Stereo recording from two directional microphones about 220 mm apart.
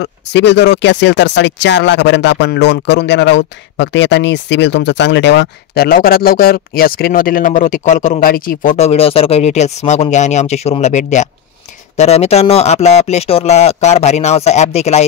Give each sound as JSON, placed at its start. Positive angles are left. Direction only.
{"t": 0.0, "sound": "speech", "side_deg": 55}